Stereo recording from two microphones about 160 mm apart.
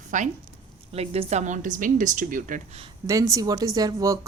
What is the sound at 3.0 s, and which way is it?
Speech, 20° right (ahead or behind).